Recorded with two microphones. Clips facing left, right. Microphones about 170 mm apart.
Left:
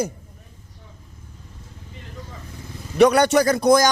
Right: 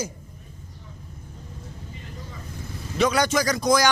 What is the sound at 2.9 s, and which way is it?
Speech, 60° left (ahead or behind).